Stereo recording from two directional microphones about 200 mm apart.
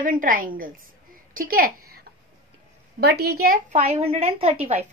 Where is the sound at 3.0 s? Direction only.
55° right (ahead or behind).